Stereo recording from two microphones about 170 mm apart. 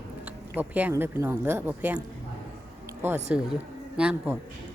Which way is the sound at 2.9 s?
15° right (ahead or behind).